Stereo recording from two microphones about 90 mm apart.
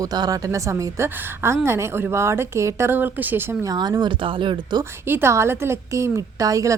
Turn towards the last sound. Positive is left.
turn(degrees=-40)  # may be behind; listen again after turning